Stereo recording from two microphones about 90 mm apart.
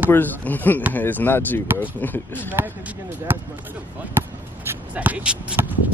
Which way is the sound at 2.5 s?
25° right (ahead or behind).